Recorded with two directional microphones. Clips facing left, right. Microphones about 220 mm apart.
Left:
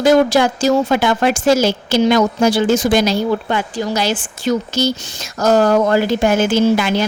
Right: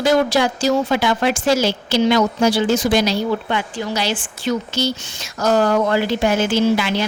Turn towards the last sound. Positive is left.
turn(degrees=45)  # may be behind; listen again after turning